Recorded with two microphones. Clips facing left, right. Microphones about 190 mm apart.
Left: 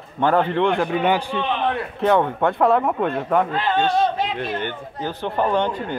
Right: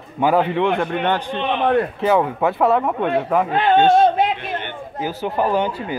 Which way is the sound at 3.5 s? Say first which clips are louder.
Right 6 dB; 60° right (ahead or behind).